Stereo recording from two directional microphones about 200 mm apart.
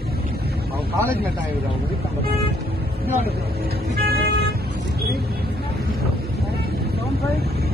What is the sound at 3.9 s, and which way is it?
Vehicle, 50° right (ahead or behind).